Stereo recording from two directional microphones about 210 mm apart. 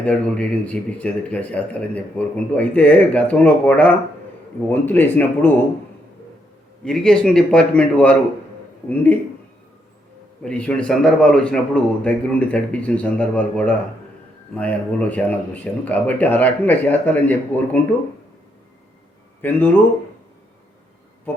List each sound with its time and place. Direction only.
0.0 s a man's voice: 5° left (ahead or behind)
6.8 s a man's voice: 5° left (ahead or behind)
10.4 s a man's voice: 5° left (ahead or behind)
19.4 s a man's voice: 10° left (ahead or behind)
21.3 s a sound: 10° left (ahead or behind)